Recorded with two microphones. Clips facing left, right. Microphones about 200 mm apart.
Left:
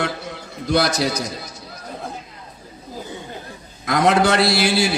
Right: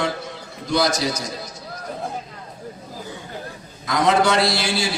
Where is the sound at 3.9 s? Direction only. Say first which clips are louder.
Left 2 dB; 60° left (ahead or behind).